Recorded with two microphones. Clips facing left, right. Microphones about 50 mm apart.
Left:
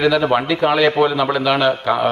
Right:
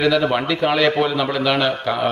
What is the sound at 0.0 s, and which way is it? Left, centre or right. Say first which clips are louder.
A man's voice: left 2 dB; centre.